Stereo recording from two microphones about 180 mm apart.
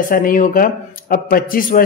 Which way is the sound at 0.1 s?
50° left (ahead or behind).